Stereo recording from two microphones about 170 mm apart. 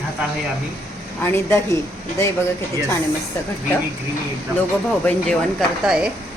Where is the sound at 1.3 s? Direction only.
15° left (ahead or behind).